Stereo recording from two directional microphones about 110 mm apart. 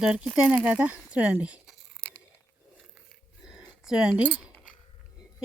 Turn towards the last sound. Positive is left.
turn(degrees=-10)  # may be behind; listen again after turning